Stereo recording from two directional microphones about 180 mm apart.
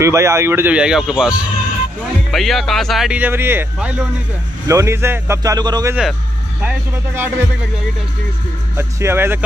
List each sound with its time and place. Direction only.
0.0 s speech: 15° right (ahead or behind)
2.3 s speech: centre (ahead or behind); by 5.9 s 20° right (ahead or behind)
6.6 s speech: 10° right (ahead or behind)
8.7 s speech: 10° right (ahead or behind)